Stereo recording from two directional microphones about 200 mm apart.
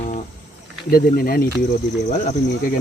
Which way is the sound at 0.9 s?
45° left (ahead or behind).